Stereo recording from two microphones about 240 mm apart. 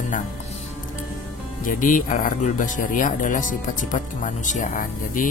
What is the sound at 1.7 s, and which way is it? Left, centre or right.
Speech, left.